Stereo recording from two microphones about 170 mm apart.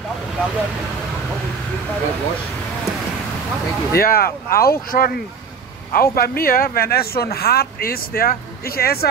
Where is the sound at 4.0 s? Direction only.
60° left (ahead or behind).